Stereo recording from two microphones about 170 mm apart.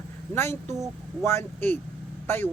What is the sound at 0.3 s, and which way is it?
Speech, 15° left (ahead or behind).